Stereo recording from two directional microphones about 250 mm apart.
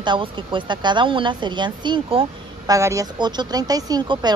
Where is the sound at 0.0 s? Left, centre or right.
Centre.